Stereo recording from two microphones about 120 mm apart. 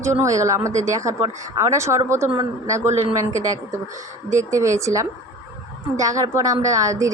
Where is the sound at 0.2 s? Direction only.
25° right (ahead or behind).